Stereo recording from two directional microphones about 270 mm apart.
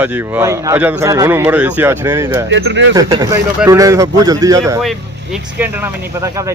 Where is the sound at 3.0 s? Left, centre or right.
Centre.